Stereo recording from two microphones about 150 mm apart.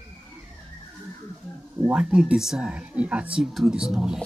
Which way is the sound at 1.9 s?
5° right (ahead or behind).